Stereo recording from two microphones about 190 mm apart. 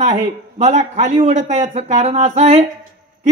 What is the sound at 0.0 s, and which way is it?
A man's voice, 35° right (ahead or behind).